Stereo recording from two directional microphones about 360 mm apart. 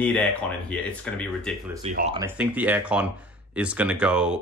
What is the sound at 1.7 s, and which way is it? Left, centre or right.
Speech, centre.